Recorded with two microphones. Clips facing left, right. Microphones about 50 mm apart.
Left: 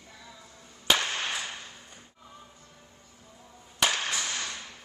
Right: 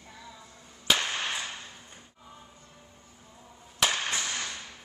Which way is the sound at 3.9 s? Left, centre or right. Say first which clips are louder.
Even; right.